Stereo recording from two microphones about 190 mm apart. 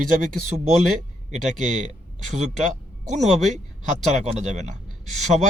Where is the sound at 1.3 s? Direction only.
40° right (ahead or behind).